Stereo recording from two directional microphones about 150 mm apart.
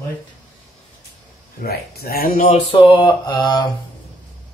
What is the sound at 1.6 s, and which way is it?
Speech, 90° left.